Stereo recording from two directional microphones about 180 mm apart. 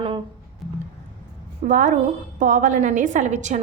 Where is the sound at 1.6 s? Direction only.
45° right (ahead or behind).